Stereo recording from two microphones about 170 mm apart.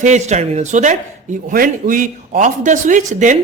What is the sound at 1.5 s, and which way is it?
Speech, 55° right (ahead or behind).